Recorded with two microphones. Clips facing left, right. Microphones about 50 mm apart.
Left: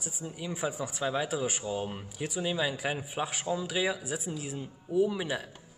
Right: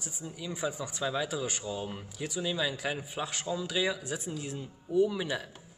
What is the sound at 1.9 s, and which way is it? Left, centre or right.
A man's voice, centre.